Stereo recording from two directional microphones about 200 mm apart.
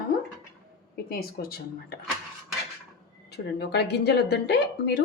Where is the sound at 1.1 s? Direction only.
50° left (ahead or behind).